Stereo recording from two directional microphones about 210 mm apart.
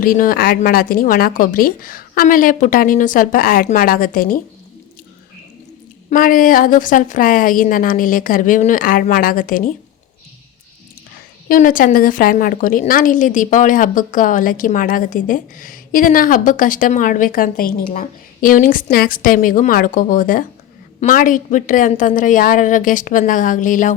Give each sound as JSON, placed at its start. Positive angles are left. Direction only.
{"t": 0.0, "sound": "a woman's voice", "side_deg": 40}
{"t": 6.1, "sound": "a woman's voice", "side_deg": 40}
{"t": 11.4, "sound": "a woman's voice", "side_deg": 40}